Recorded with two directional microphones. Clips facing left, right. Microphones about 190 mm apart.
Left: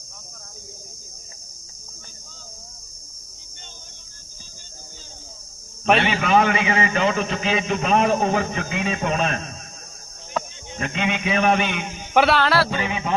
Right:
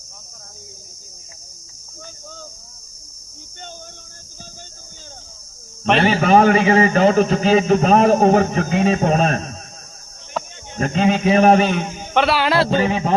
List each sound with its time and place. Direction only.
6.0 s a man's voice: 40° right (ahead or behind)
10.8 s a man's voice: 40° right (ahead or behind)
12.1 s music: centre (ahead or behind)
12.4 s a sound: 20° right (ahead or behind)
12.7 s a man's voice: 40° right (ahead or behind)